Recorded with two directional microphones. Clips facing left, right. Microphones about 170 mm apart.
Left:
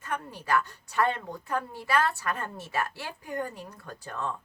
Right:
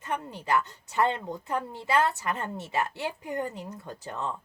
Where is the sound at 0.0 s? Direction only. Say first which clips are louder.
Right 2 dB; 20° right (ahead or behind).